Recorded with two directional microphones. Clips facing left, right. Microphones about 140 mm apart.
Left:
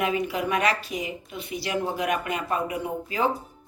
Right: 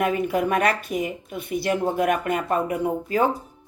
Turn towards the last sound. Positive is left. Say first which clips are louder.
# right 4 dB
turn(degrees=-50)  # may be behind; listen again after turning